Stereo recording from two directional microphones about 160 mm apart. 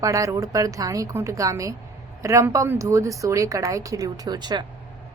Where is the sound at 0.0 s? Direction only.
20° right (ahead or behind).